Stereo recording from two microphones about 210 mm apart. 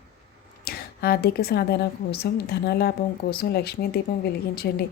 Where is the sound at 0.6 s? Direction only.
45° left (ahead or behind).